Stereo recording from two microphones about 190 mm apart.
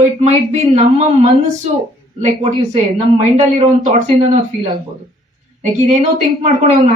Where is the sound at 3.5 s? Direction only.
35° right (ahead or behind).